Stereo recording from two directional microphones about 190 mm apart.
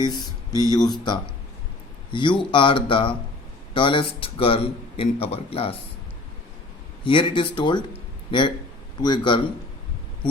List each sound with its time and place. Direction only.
0.0 s a man's voice: 25° left (ahead or behind)
7.0 s a man's voice: 25° left (ahead or behind)